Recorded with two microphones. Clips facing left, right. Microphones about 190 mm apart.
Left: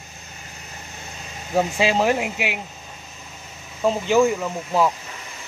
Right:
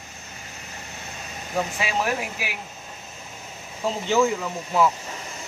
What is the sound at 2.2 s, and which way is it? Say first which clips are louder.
Speech: left 6 dB; 25° left (ahead or behind).